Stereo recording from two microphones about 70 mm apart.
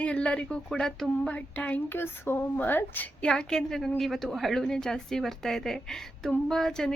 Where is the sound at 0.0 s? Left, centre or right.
Centre.